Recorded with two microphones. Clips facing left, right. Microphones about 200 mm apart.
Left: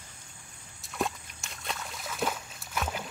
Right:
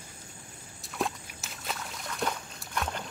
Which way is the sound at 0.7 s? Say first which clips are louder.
Even; centre (ahead or behind).